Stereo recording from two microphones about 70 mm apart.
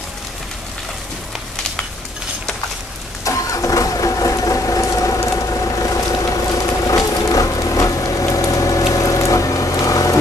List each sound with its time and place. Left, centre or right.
3.3 s vehicle: left